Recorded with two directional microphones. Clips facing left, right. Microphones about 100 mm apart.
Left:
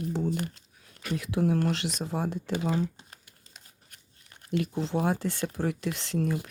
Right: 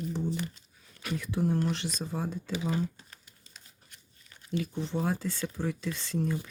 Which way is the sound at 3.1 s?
50° left (ahead or behind).